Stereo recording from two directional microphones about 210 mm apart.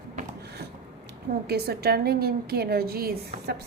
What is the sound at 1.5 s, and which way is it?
A woman's voice, 50° right (ahead or behind).